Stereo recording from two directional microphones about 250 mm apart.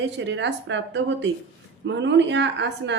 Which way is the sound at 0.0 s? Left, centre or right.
Right.